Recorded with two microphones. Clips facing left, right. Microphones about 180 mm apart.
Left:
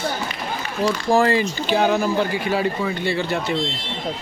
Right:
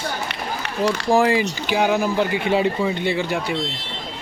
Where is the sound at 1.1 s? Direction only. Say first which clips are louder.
Even; 15° right (ahead or behind).